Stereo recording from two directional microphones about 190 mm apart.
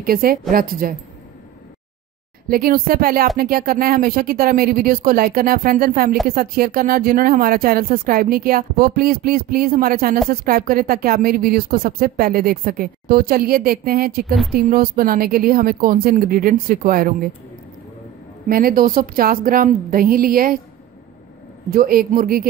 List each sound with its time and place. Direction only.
0.0 s a woman's voice: 50° right (ahead or behind)
2.4 s a woman's voice: 50° right (ahead or behind)
18.5 s a woman's voice: 50° right (ahead or behind)
21.6 s a woman's voice: 50° right (ahead or behind)